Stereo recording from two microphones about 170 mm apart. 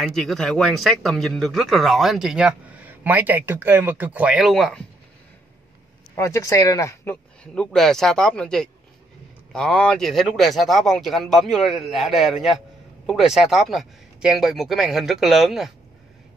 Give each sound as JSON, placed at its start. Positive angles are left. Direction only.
{"t": 0.0, "sound": "speech", "side_deg": 0}
{"t": 6.1, "sound": "speech", "side_deg": 15}
{"t": 7.5, "sound": "speech", "side_deg": 5}